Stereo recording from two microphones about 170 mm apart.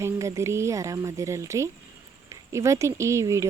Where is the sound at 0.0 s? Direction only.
15° right (ahead or behind).